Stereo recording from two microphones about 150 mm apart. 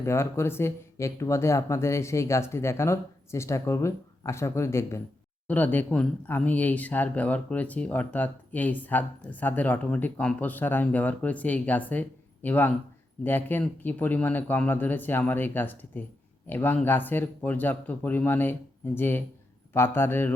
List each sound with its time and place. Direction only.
0.0 s speech: 15° left (ahead or behind)